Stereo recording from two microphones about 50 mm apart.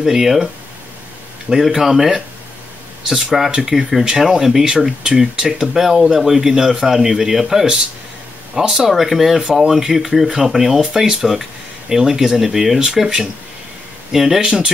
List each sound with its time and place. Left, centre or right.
0.0 s speech: centre
1.5 s speech: centre